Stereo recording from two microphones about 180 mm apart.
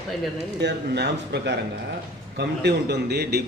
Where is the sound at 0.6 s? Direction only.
70° right (ahead or behind).